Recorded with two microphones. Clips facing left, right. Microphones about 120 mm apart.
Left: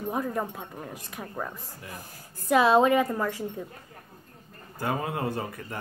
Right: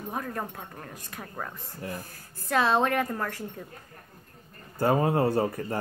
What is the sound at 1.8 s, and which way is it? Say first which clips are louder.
Speech: right 7 dB; 40° right (ahead or behind).